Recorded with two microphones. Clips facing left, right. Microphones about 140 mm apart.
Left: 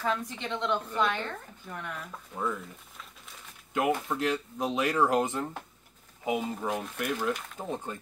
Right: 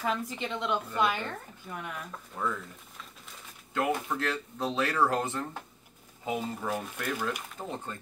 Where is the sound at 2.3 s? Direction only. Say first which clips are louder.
Left 1 dB; 10° left (ahead or behind).